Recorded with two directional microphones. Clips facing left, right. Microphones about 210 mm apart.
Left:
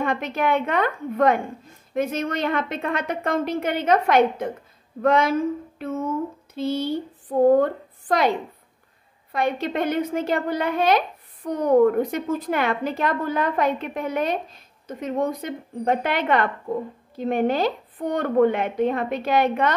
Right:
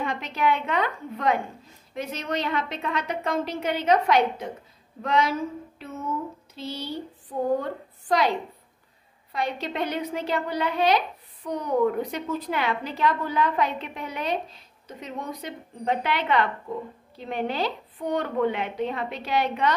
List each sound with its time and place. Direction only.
0.0 s a woman's voice: 50° left (ahead or behind)
9.3 s a woman's voice: 50° left (ahead or behind)